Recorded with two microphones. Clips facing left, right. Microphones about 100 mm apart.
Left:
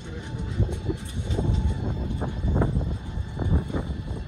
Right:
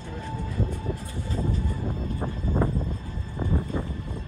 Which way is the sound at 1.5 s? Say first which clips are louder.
Even; 25° left (ahead or behind).